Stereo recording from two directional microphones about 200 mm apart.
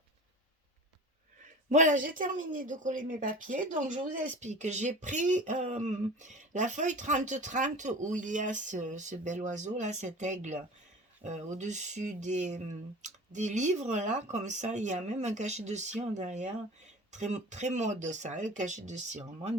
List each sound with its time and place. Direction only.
1.7 s speech: 40° right (ahead or behind)